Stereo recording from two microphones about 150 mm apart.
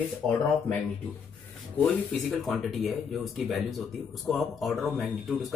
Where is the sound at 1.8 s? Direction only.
5° left (ahead or behind).